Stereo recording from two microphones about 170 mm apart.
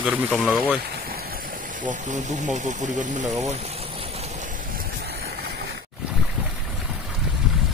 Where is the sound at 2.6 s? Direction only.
45° right (ahead or behind).